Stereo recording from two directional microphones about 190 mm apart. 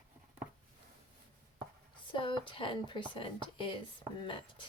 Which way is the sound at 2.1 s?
25° left (ahead or behind).